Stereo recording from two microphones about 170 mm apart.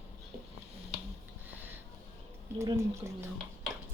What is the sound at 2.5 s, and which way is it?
Speech, 15° right (ahead or behind).